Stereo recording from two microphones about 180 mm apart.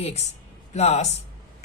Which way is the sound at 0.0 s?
35° left (ahead or behind).